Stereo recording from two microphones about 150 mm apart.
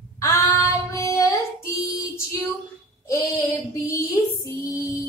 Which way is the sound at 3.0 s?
20° left (ahead or behind).